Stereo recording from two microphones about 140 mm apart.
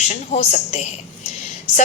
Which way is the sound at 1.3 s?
55° left (ahead or behind).